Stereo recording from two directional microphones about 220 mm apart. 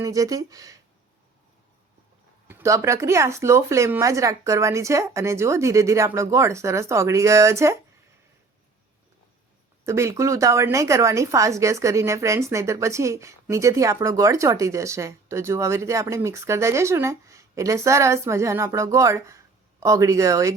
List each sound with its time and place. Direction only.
0.0 s a woman's voice: 15° right (ahead or behind)
2.5 s a woman's voice: 10° right (ahead or behind)
9.8 s a woman's voice: 15° right (ahead or behind)